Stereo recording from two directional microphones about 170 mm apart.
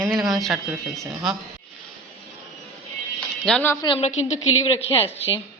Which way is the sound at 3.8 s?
35° left (ahead or behind).